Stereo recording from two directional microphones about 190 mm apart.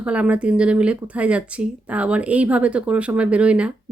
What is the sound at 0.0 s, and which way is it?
A woman's voice, 5° right (ahead or behind).